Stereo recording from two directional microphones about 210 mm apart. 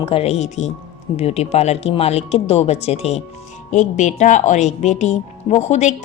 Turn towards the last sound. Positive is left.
turn(degrees=35)  # may be behind; listen again after turning